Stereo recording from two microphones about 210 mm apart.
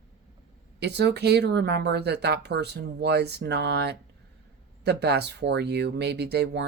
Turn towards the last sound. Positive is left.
turn(degrees=-50)  # may be behind; listen again after turning